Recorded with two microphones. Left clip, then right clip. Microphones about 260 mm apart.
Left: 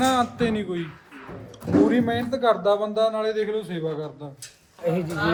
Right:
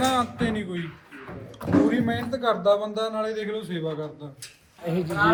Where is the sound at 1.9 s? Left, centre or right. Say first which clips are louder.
Left 3 dB; left.